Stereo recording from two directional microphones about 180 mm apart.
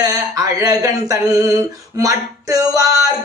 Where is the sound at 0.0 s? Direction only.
20° right (ahead or behind).